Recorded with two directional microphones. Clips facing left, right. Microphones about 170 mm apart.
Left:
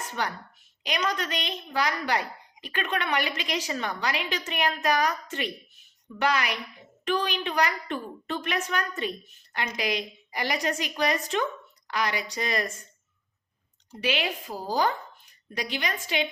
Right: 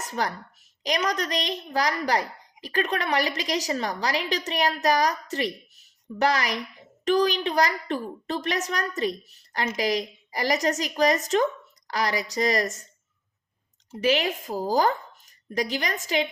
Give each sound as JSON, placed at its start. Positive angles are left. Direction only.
{"t": 0.0, "sound": "a woman's voice", "side_deg": -40}
{"t": 14.0, "sound": "speech", "side_deg": -40}